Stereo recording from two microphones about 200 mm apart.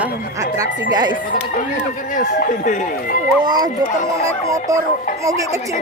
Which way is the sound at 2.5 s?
40° left (ahead or behind).